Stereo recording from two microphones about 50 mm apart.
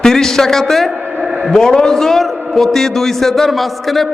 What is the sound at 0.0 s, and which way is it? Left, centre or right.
A man's voice, centre.